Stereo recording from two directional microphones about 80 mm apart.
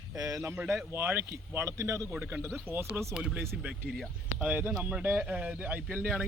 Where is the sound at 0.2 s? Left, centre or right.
Right.